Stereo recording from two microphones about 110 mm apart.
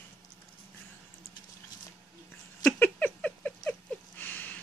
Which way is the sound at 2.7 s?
15° left (ahead or behind).